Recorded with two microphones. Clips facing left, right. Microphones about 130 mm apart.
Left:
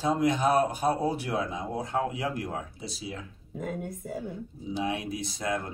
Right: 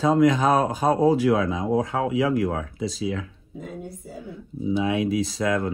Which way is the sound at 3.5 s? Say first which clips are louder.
Left 1 dB; 55° left (ahead or behind).